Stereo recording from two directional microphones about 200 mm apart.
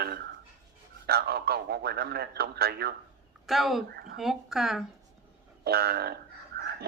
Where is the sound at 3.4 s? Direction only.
Centre (ahead or behind).